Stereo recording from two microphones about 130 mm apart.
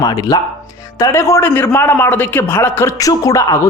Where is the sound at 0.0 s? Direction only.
30° left (ahead or behind).